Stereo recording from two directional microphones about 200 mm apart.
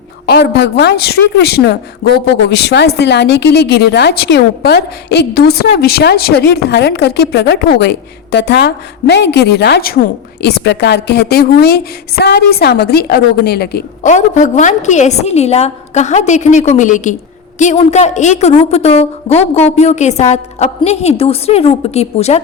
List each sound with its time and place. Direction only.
0.3 s a woman's voice: 55° left (ahead or behind)
14.0 s a woman's voice: 35° left (ahead or behind)